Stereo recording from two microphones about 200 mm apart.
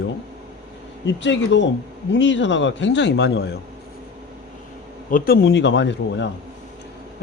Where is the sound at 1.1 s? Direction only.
65° left (ahead or behind).